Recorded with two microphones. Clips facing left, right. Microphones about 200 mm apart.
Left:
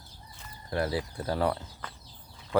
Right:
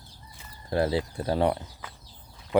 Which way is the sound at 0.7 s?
25° right (ahead or behind).